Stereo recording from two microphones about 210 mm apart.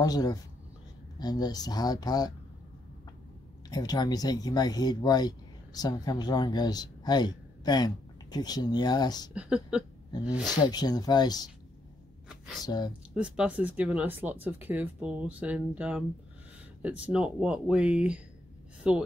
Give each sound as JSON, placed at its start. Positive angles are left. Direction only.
{"t": 0.0, "sound": "speech", "side_deg": 20}
{"t": 3.7, "sound": "speech", "side_deg": 20}
{"t": 9.3, "sound": "speech", "side_deg": -5}
{"t": 10.4, "sound": "speech", "side_deg": 20}
{"t": 12.3, "sound": "a sound", "side_deg": 0}
{"t": 12.6, "sound": "speech", "side_deg": 20}
{"t": 13.1, "sound": "speech", "side_deg": -5}